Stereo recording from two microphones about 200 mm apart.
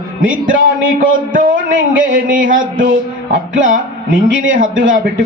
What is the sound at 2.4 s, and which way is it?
Speech, 75° right (ahead or behind).